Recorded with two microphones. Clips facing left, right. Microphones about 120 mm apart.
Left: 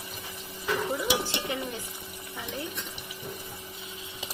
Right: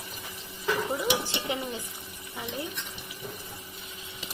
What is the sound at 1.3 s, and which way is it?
Dishes, 20° right (ahead or behind).